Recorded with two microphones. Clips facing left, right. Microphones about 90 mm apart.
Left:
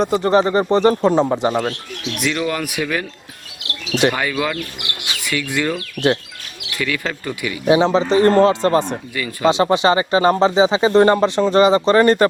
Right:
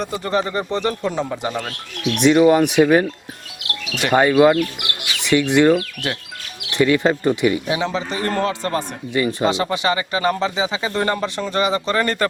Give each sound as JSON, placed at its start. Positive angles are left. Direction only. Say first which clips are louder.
{"t": 0.2, "sound": "speech", "louder": "left 6 dB", "side_deg": 30}
{"t": 2.2, "sound": "speech", "louder": "right 9 dB", "side_deg": -20}
{"t": 3.6, "sound": "bird", "louder": "left 7 dB", "side_deg": 25}
{"t": 4.1, "sound": "speech", "louder": "right 9 dB", "side_deg": -30}
{"t": 7.7, "sound": "speech", "louder": "left 8 dB", "side_deg": 25}
{"t": 9.1, "sound": "speech", "louder": "right 2 dB", "side_deg": -25}
{"t": 9.5, "sound": "speech", "louder": "left 5 dB", "side_deg": 25}